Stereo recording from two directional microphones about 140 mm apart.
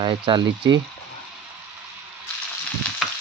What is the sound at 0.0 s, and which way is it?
Frying, 35° right (ahead or behind).